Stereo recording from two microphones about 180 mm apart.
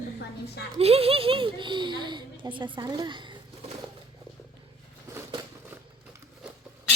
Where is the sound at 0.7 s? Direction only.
35° right (ahead or behind).